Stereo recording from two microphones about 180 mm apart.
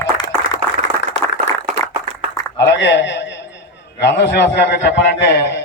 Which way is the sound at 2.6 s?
75° left (ahead or behind).